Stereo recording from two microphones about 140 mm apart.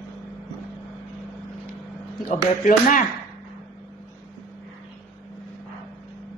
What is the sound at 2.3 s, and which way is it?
Speech, 85° left.